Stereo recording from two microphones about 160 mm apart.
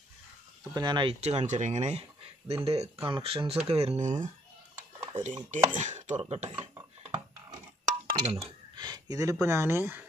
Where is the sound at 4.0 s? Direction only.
50° right (ahead or behind).